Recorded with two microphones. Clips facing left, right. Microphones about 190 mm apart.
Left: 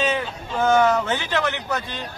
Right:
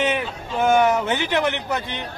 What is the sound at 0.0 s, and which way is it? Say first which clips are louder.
A man's voice: right 1 dB; 20° right (ahead or behind).